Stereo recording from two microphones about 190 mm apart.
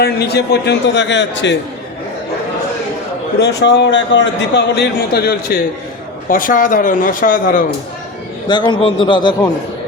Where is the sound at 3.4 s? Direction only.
65° left (ahead or behind); by 7.6 s 45° left (ahead or behind).